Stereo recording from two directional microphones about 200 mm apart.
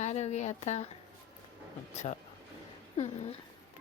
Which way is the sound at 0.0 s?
35° left (ahead or behind).